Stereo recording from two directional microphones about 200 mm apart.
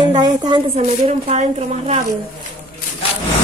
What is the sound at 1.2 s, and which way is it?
Speech, 35° right (ahead or behind).